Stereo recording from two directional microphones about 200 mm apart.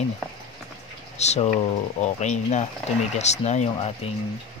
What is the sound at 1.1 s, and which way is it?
Speech, 35° left (ahead or behind).